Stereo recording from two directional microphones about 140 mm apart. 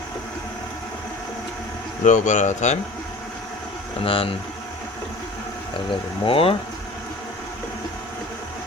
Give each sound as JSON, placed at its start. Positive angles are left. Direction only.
{"t": 2.0, "sound": "speech", "side_deg": 60}
{"t": 4.0, "sound": "speech", "side_deg": 40}
{"t": 5.7, "sound": "speech", "side_deg": 40}